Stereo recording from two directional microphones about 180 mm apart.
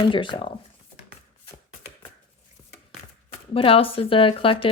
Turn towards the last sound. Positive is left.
turn(degrees=30)  # may be behind; listen again after turning